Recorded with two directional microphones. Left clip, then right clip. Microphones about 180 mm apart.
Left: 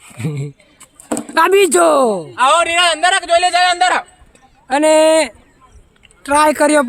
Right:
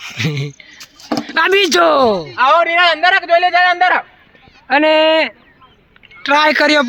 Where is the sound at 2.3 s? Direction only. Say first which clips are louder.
Even; 20° right (ahead or behind).